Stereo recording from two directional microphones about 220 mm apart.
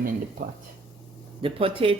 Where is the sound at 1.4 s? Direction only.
25° right (ahead or behind).